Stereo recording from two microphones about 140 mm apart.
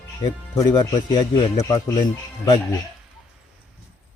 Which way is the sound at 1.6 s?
25° left (ahead or behind).